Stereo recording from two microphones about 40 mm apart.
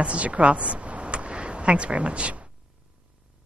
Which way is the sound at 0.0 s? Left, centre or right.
Right.